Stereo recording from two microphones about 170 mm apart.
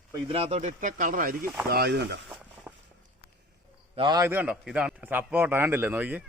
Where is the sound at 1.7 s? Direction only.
75° right (ahead or behind).